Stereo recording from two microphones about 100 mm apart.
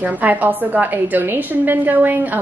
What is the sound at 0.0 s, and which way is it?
A woman's voice, 15° right (ahead or behind).